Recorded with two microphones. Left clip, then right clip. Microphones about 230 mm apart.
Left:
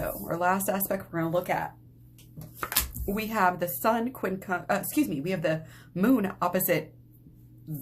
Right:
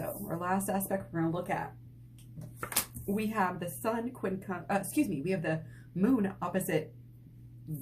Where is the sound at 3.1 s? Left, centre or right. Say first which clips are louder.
Left 6 dB; left.